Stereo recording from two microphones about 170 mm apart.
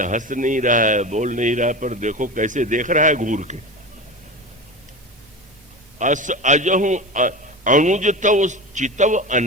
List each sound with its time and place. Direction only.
0.0 s speech: 50° right (ahead or behind)
6.0 s speech: 45° right (ahead or behind)